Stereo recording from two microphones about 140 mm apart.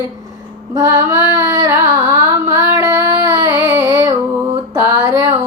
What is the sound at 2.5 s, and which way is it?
Child singing, 25° right (ahead or behind).